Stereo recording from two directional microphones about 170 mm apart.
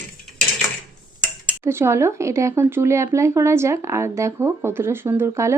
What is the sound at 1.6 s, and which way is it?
Speech, 15° right (ahead or behind).